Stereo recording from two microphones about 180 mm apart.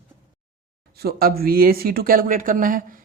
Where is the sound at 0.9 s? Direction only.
55° right (ahead or behind).